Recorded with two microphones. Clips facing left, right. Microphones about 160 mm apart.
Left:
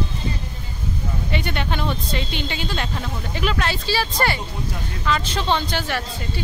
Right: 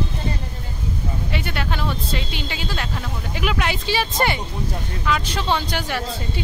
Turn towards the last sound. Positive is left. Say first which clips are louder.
# left 1 dB
turn(degrees=-10)  # may be behind; listen again after turning